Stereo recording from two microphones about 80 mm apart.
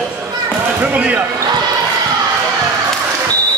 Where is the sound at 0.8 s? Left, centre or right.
Centre.